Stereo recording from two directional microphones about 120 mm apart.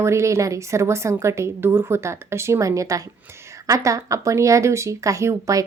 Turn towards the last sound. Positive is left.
turn(degrees=-25)  # may be behind; listen again after turning